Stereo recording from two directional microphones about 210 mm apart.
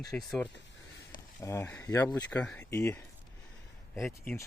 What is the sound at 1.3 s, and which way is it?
A man's voice, 10° left (ahead or behind).